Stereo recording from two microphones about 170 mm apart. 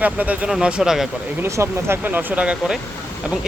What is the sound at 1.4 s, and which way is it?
Speech, 15° right (ahead or behind).